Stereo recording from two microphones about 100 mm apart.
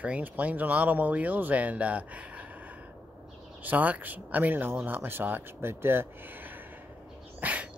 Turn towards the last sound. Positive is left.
turn(degrees=-15)  # may be behind; listen again after turning